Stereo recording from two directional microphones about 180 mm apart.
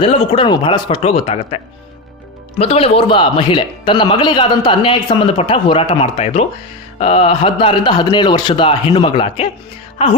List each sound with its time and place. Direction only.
0.0 s a man's voice: 30° left (ahead or behind)